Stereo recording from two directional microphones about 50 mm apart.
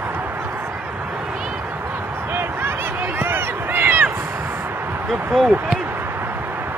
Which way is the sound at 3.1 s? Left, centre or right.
Right.